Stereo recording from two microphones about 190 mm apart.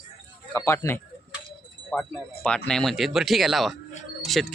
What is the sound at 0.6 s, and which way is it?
Speech, 15° left (ahead or behind).